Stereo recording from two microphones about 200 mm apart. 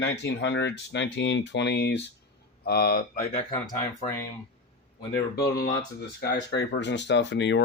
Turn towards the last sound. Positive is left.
turn(degrees=60)  # may be behind; listen again after turning